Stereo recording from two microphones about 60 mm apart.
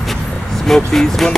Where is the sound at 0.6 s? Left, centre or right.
Centre.